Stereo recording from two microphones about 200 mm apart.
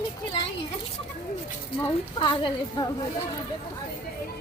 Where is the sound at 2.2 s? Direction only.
25° left (ahead or behind).